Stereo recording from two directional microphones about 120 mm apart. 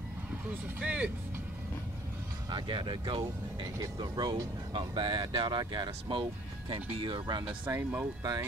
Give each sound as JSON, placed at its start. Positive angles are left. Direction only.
{"t": 0.7, "sound": "speech", "side_deg": -10}
{"t": 2.5, "sound": "speech", "side_deg": -40}
{"t": 7.7, "sound": "speech", "side_deg": -20}